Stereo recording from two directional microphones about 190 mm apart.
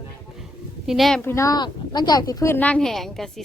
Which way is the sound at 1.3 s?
20° left (ahead or behind).